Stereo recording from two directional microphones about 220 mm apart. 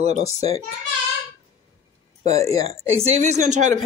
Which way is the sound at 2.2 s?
30° right (ahead or behind).